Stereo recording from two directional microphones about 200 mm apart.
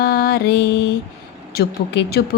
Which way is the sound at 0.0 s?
50° left (ahead or behind).